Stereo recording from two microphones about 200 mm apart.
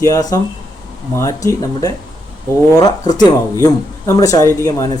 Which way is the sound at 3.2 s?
15° left (ahead or behind).